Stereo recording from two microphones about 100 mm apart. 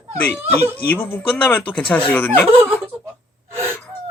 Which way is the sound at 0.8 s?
15° left (ahead or behind).